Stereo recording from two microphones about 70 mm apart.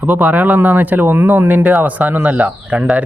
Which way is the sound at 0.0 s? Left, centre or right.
Right.